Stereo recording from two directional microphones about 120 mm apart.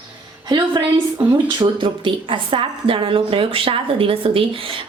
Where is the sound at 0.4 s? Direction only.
35° right (ahead or behind).